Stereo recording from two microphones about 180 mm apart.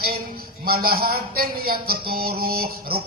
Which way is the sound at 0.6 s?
55° right (ahead or behind).